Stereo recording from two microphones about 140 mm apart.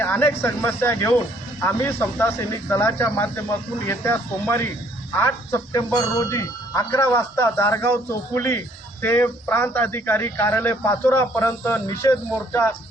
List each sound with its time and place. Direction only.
0.0 s speech: 15° left (ahead or behind)